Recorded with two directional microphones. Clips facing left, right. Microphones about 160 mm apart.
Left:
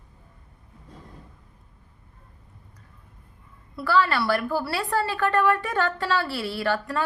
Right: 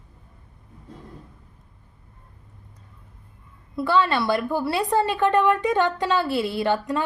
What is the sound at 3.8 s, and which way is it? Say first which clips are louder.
A woman's voice: right 2 dB; 20° right (ahead or behind).